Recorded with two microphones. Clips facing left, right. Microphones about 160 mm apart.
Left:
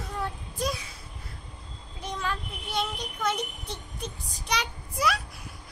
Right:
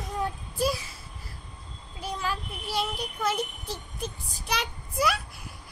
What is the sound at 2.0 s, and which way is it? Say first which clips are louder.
Child singing: right 1 dB; 5° right (ahead or behind).